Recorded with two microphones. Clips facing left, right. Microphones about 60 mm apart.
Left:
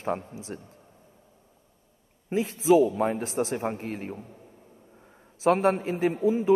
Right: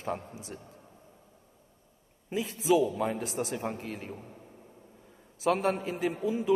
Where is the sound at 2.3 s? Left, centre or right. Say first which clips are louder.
Left 5 dB; left.